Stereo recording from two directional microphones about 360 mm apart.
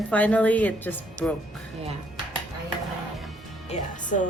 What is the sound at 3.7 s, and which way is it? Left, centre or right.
Speech, left.